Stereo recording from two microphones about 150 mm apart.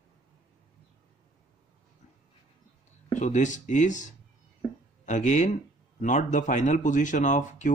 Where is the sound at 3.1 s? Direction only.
55° left (ahead or behind).